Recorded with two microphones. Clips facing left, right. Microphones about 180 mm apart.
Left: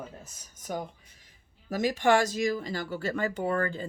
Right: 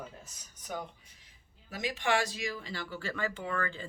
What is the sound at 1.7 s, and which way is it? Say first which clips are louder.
Speech: left 8 dB; 45° left (ahead or behind).